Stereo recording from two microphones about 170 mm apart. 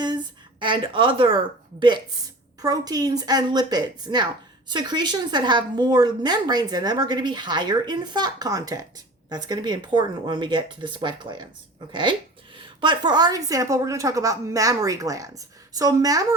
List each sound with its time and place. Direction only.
0.6 s a woman's voice: 30° right (ahead or behind)
2.6 s a woman's voice: 20° right (ahead or behind)